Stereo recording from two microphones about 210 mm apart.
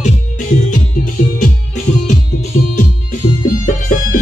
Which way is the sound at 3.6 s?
40° left (ahead or behind).